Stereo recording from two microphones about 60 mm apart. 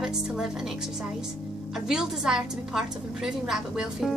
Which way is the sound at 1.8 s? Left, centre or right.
Centre.